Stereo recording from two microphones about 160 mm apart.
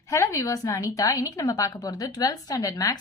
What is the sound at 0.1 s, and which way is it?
A woman's voice, 20° left (ahead or behind).